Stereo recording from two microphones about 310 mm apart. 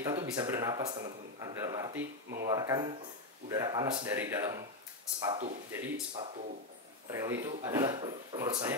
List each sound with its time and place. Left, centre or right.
0.0 s a man's voice: centre
5.3 s speech: right
5.7 s a man's voice: centre